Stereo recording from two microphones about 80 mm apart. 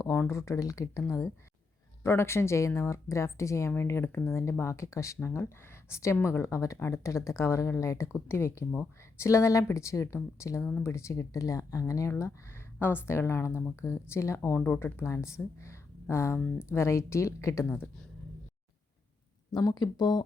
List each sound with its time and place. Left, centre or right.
0.3 s speech: left
13.8 s speech: left
19.5 s speech: left